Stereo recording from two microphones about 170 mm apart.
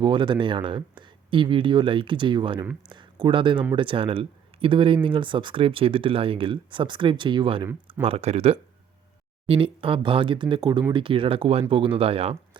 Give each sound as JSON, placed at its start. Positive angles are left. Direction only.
{"t": 0.0, "sound": "speech", "side_deg": -30}